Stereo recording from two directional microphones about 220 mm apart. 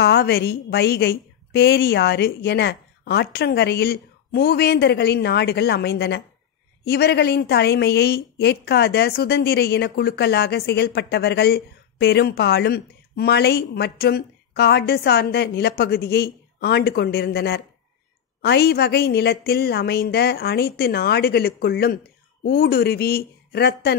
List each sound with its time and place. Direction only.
0.0 s a woman's voice: 45° left (ahead or behind)